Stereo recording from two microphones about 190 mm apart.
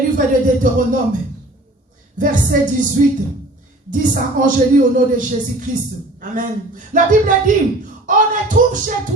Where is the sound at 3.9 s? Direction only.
45° right (ahead or behind).